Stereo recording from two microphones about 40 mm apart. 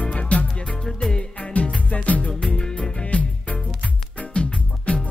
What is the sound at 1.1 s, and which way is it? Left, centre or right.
Music, left.